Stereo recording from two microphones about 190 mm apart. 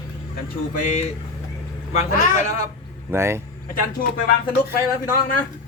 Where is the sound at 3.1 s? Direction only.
15° right (ahead or behind).